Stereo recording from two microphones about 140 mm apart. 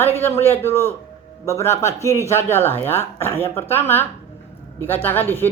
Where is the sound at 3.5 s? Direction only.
15° left (ahead or behind).